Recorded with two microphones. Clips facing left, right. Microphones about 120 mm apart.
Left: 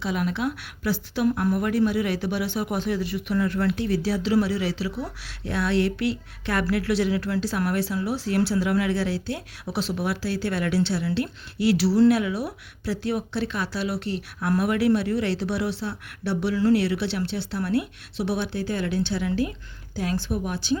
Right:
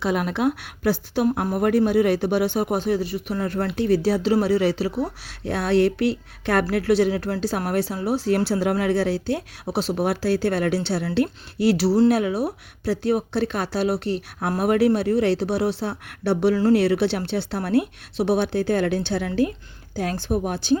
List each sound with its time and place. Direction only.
0.0 s speech: 55° right (ahead or behind)